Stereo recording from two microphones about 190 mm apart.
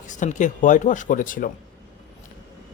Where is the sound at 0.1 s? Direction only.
40° left (ahead or behind).